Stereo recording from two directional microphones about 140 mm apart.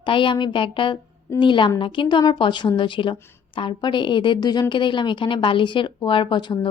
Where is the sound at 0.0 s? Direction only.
35° left (ahead or behind).